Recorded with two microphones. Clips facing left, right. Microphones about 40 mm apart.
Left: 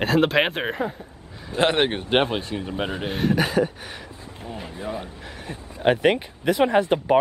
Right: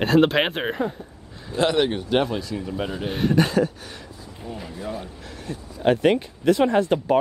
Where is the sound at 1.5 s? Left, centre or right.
Left.